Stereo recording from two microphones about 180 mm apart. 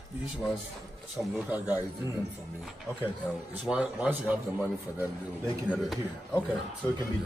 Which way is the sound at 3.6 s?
5° right (ahead or behind).